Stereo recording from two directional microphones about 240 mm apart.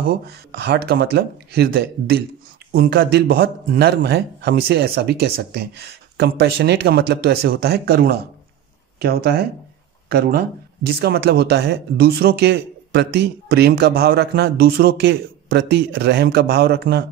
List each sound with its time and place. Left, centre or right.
0.0 s speech: right